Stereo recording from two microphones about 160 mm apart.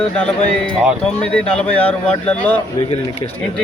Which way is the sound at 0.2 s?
5° left (ahead or behind).